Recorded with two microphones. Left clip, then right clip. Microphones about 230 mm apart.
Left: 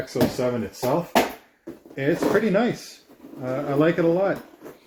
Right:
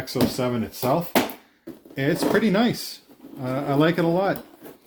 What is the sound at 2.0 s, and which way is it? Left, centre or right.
Speech, right.